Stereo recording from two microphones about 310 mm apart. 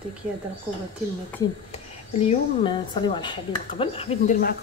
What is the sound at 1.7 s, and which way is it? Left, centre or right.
A woman's voice, centre.